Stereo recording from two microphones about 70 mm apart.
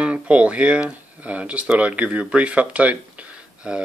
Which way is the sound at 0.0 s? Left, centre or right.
Centre.